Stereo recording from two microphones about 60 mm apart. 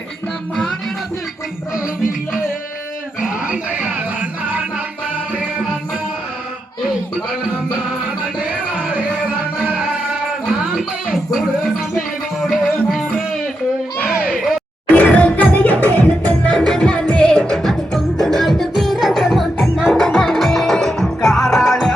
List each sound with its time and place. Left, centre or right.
10.4 s music: centre
11.1 s a sound: centre
11.9 s music: centre
14.3 s a sound: centre
14.9 s music: left
16.6 s music: centre